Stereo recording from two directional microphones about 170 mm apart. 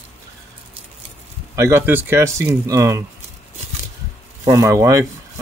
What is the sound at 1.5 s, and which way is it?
Speech, 15° right (ahead or behind).